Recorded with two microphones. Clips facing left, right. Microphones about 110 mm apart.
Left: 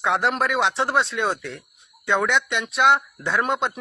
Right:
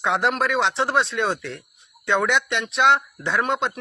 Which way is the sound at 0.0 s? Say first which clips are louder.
Even; centre (ahead or behind).